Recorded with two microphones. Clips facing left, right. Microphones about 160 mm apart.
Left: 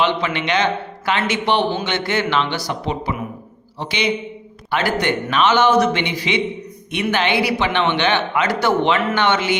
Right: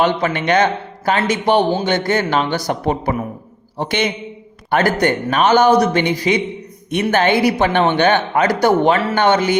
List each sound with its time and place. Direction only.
0.0 s a man's voice: 45° right (ahead or behind)